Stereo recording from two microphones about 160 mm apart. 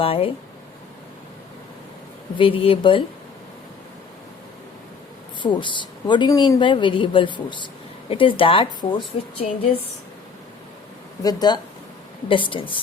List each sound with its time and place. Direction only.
0.0 s speech: 35° left (ahead or behind)
2.4 s speech: 35° left (ahead or behind)
5.4 s speech: 30° left (ahead or behind)
11.2 s speech: 25° left (ahead or behind)